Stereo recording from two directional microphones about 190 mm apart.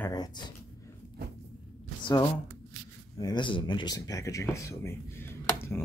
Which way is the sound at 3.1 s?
20° left (ahead or behind).